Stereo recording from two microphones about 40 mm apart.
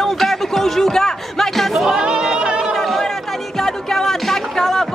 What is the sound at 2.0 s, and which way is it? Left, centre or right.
Speech, centre.